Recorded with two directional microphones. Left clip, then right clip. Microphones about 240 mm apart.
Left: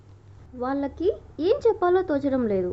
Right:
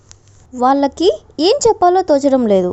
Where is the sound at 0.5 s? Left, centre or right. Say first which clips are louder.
Right 15 dB; right.